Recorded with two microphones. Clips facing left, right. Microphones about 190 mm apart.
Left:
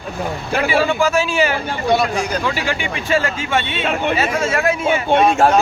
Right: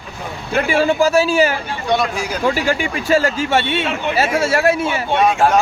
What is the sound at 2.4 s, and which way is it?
Speech, 45° right (ahead or behind).